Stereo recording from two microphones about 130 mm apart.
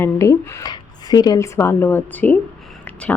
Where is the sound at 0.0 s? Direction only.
25° left (ahead or behind).